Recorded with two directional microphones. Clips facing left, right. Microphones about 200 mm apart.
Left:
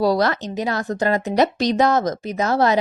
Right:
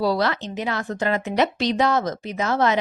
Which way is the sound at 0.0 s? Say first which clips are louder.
Left 3 dB; 45° left (ahead or behind).